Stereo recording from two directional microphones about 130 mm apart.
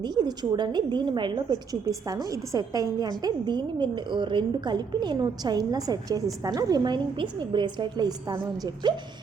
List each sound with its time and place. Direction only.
0.0 s a woman's voice: 30° right (ahead or behind)